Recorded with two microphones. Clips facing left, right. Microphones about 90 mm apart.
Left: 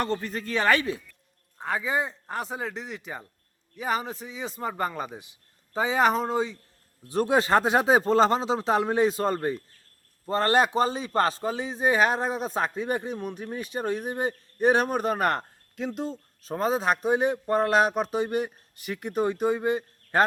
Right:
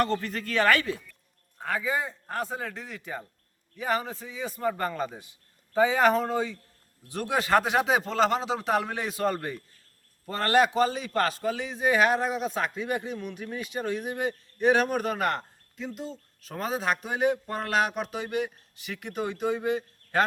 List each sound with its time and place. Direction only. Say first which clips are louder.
0.0 s a man's voice: right 1 dB; 20° left (ahead or behind); by 15.4 s 45° left (ahead or behind)
15.7 s speech: left 5 dB; 70° left (ahead or behind)
16.4 s a man's voice: left 5 dB; 35° left (ahead or behind)